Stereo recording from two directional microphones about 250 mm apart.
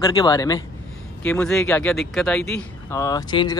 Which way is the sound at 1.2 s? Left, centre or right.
Centre.